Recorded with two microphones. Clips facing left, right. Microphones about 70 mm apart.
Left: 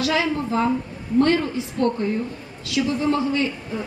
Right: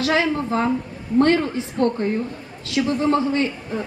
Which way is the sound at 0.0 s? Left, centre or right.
Right.